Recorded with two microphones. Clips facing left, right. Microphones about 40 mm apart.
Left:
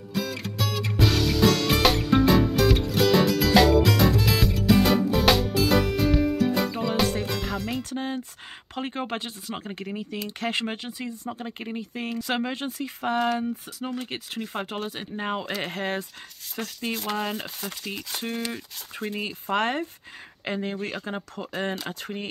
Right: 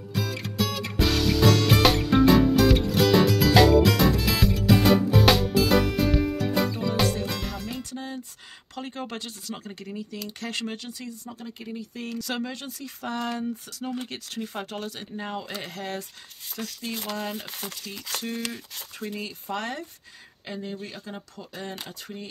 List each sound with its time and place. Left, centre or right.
0.1 s music: centre
7.8 s music: left
8.7 s speech: left
20.4 s speech: left